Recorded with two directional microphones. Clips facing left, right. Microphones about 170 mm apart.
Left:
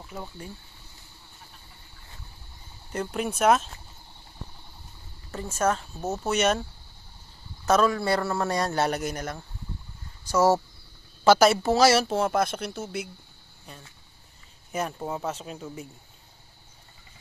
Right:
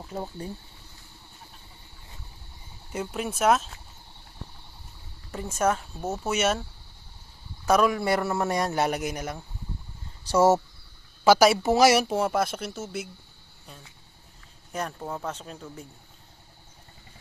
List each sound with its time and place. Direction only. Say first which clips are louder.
0.0 s speech: right 4 dB; 30° right (ahead or behind)
2.9 s speech: left 2 dB; 5° right (ahead or behind)
5.3 s speech: even; 10° right (ahead or behind)
7.6 s speech: even; 15° right (ahead or behind)
10.3 s speech: right 1 dB; 25° right (ahead or behind)
11.2 s speech: even; 10° right (ahead or behind)
14.7 s speech: left 2 dB; 5° left (ahead or behind)